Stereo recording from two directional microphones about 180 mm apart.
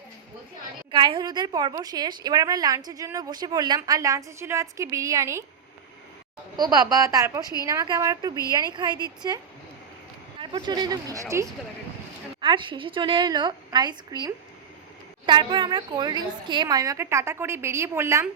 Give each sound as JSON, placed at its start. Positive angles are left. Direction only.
{"t": 0.9, "sound": "a woman's voice", "side_deg": -25}
{"t": 6.6, "sound": "a woman's voice", "side_deg": -20}
{"t": 10.3, "sound": "a woman's voice", "side_deg": -25}
{"t": 12.4, "sound": "a woman's voice", "side_deg": -25}